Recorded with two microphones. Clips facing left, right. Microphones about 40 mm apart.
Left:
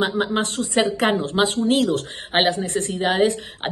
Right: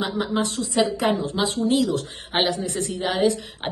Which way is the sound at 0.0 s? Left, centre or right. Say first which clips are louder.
Left 3 dB; left.